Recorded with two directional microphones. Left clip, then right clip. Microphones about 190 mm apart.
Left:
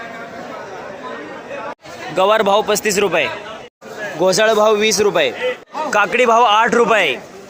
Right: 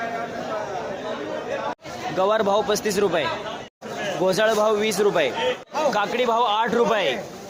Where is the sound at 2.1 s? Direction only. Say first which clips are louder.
Left 7 dB; 20° left (ahead or behind).